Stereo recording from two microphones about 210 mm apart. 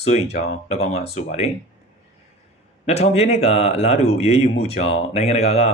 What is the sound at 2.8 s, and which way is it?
Speech, 30° left (ahead or behind).